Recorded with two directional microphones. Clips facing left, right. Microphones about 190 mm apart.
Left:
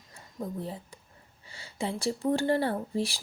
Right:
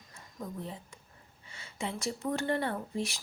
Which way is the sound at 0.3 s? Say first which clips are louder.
Left 5 dB; 35° left (ahead or behind).